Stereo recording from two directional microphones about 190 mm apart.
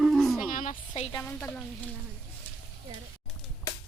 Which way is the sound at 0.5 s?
45° left (ahead or behind).